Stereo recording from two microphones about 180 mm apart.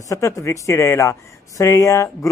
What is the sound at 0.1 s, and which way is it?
A man's voice, 15° left (ahead or behind).